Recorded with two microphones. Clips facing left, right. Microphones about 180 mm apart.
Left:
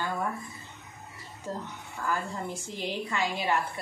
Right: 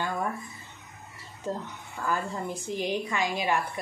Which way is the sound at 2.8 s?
15° right (ahead or behind).